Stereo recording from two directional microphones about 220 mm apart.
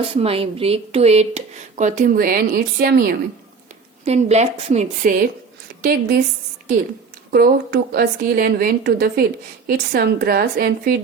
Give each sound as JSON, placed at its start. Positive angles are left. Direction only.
{"t": 0.0, "sound": "speech", "side_deg": -25}
{"t": 4.0, "sound": "a woman's voice", "side_deg": -30}
{"t": 7.3, "sound": "a woman's voice", "side_deg": -45}